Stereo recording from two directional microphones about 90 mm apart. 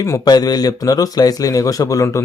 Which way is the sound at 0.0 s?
45° left (ahead or behind).